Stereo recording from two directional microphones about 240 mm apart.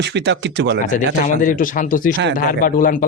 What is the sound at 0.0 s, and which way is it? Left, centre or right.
Speech, right.